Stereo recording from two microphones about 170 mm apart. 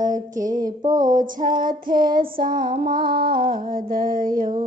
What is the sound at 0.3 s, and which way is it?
Female singing, 50° right (ahead or behind).